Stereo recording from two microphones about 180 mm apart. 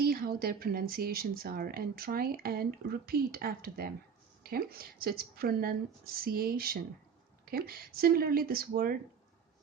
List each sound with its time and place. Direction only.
0.0 s speech: 55° right (ahead or behind)